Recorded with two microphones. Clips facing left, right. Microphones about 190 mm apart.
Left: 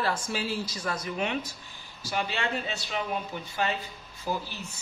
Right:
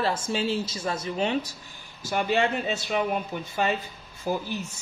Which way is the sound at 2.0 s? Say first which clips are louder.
Right 7 dB; 50° right (ahead or behind).